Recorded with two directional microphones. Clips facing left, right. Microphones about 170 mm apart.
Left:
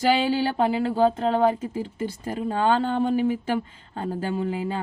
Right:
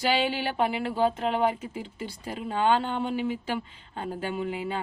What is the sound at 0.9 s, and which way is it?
Speech, 35° left (ahead or behind).